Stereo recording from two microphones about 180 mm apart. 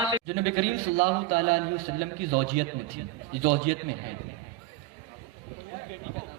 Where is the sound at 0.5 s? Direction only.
35° right (ahead or behind).